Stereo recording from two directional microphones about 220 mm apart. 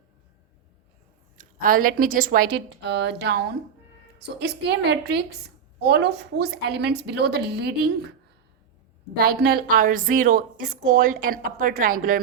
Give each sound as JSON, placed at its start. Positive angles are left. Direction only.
{"t": 1.4, "sound": "a woman's voice", "side_deg": -40}
{"t": 4.4, "sound": "a woman's voice", "side_deg": -50}
{"t": 9.2, "sound": "a woman's voice", "side_deg": -45}